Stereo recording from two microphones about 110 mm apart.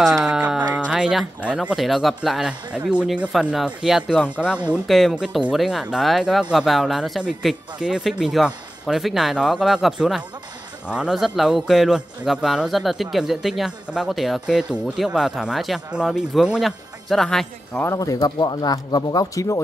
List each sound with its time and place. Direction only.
0.0 s music: centre (ahead or behind)
0.4 s music: 15° right (ahead or behind)
0.7 s a man's voice: 10° right (ahead or behind)
17.8 s speech: 30° left (ahead or behind)